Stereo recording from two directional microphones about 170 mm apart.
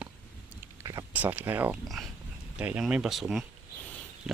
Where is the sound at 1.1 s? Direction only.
10° right (ahead or behind).